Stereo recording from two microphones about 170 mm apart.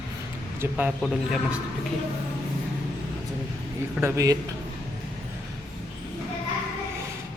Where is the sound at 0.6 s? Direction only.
10° right (ahead or behind).